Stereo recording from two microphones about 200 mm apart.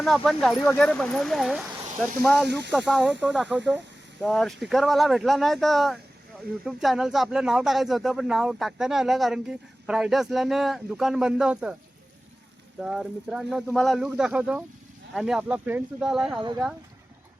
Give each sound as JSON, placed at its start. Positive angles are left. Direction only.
{"t": 0.0, "sound": "speech", "side_deg": 0}
{"t": 2.5, "sound": "speech", "side_deg": -60}
{"t": 2.7, "sound": "speech", "side_deg": 5}
{"t": 12.8, "sound": "speech", "side_deg": -5}